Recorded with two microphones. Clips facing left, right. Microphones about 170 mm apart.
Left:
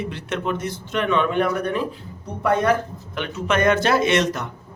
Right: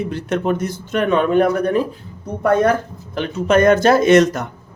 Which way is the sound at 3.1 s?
40° right (ahead or behind).